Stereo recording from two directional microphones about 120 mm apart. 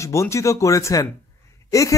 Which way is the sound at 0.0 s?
25° left (ahead or behind).